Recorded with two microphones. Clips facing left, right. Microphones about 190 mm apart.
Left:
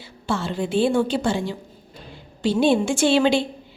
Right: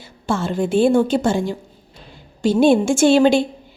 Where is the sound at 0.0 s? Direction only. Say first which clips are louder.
Right 4 dB; 50° right (ahead or behind).